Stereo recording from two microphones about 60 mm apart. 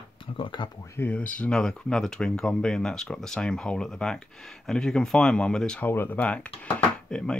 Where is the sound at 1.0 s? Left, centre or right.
Left.